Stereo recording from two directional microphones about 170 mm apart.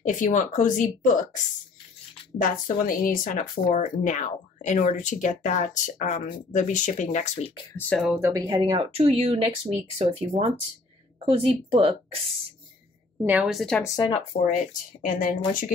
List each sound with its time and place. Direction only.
0.0 s speech: 50° left (ahead or behind)
2.4 s speech: 55° left (ahead or behind)
8.2 s speech: 20° right (ahead or behind)
13.2 s a woman's voice: 5° right (ahead or behind)
13.8 s speech: 25° left (ahead or behind)
14.3 s speech: 50° left (ahead or behind)